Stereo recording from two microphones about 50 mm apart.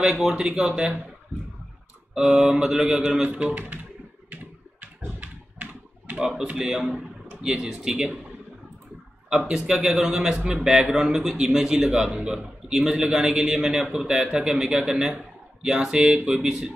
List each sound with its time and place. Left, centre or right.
0.2 s a man's voice: centre
2.1 s a man's voice: centre
3.5 s speech: right
5.2 s typing: right
6.1 s a man's voice: centre
9.7 s a man's voice: centre
13.3 s a man's voice: right